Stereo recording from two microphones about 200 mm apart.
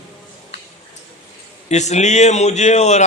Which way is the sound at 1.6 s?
35° left (ahead or behind).